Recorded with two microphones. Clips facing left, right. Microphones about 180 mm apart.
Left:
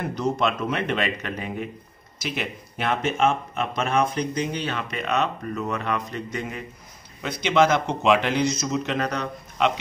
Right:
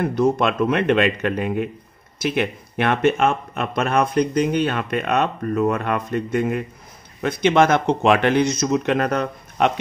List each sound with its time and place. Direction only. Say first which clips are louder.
0.0 s speech: right 6 dB; 55° right (ahead or behind)